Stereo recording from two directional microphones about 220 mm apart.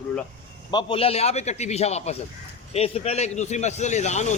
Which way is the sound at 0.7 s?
20° left (ahead or behind).